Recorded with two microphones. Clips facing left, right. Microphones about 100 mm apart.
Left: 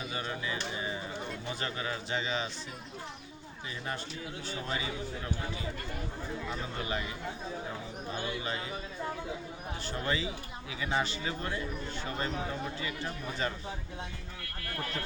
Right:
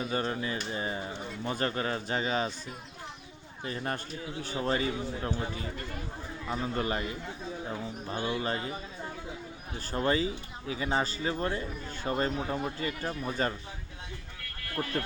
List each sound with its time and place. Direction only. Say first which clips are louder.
0.1 s speech: right 5 dB; 40° right (ahead or behind)
3.7 s speech: right 4 dB; 45° right (ahead or behind)
6.5 s speech: right 8 dB; 40° right (ahead or behind)
8.1 s speech: right 5 dB; 35° right (ahead or behind)
9.8 s speech: right 6 dB; 40° right (ahead or behind)